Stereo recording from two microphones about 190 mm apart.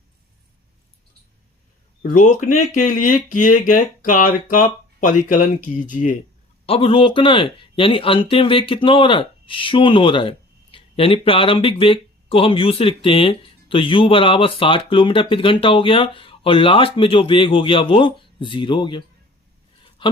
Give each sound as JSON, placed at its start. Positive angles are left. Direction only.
{"t": 2.0, "sound": "speech", "side_deg": 40}
{"t": 6.7, "sound": "speech", "side_deg": 30}